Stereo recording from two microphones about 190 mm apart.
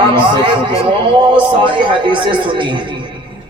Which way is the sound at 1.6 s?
25° right (ahead or behind).